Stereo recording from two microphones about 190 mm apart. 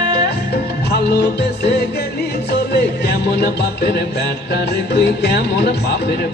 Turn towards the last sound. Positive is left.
turn(degrees=60)  # may be behind; listen again after turning